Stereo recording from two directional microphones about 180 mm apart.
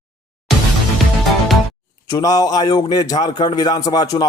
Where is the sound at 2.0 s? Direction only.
20° left (ahead or behind).